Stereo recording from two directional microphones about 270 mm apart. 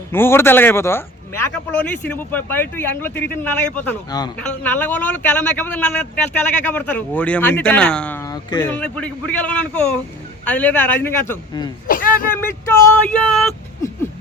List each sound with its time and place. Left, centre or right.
0.1 s speech: centre
11.9 s a man's voice: left
13.1 s speech: centre